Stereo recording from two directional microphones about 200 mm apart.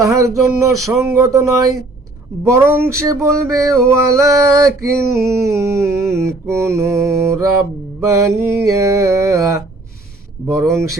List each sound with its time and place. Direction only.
0.0 s mantra: 15° right (ahead or behind)